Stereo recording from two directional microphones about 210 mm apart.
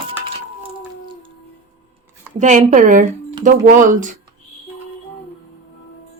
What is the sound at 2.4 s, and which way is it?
A woman's voice, 35° right (ahead or behind).